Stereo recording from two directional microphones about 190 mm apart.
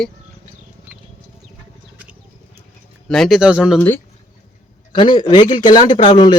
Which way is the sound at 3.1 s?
Centre (ahead or behind).